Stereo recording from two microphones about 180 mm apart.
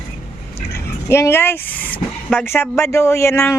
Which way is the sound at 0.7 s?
15° left (ahead or behind).